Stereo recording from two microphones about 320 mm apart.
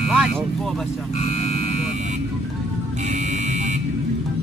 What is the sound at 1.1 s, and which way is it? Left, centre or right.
Speech, centre.